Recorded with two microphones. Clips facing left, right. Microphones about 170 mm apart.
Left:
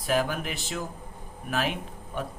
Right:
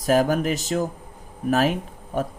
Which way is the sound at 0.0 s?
40° right (ahead or behind).